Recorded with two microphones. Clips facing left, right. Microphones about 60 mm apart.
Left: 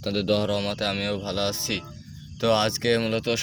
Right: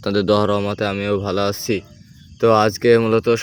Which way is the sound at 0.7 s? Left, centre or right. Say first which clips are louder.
Right 7 dB; right.